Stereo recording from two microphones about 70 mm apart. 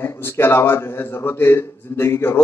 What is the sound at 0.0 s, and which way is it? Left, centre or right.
A man's voice, left.